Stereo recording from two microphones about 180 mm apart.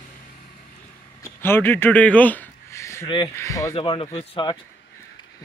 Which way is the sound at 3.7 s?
30° left (ahead or behind).